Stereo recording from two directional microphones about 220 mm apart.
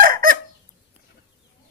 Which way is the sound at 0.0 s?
40° right (ahead or behind).